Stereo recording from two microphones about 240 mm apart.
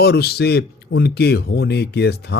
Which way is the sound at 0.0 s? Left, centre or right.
Left.